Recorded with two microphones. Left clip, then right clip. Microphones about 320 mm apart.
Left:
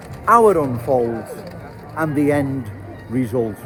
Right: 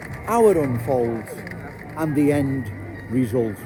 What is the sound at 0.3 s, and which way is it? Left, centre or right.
Speech, left.